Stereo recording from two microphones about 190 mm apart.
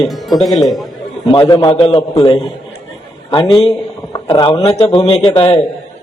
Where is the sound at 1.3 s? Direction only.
25° left (ahead or behind).